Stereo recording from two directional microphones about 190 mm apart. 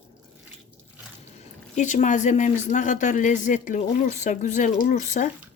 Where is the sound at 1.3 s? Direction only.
40° left (ahead or behind).